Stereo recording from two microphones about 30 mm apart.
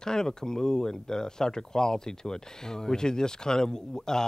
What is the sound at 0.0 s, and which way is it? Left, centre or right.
Speech, left.